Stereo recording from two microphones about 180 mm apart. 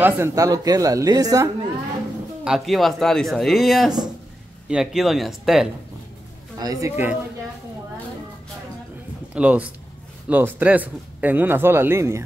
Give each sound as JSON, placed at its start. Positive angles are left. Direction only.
{"t": 0.0, "sound": "speech", "side_deg": -15}
{"t": 2.4, "sound": "speech", "side_deg": 0}
{"t": 6.6, "sound": "speech", "side_deg": -20}
{"t": 9.3, "sound": "speech", "side_deg": -10}